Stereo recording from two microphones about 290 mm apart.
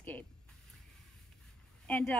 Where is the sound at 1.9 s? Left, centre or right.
Centre.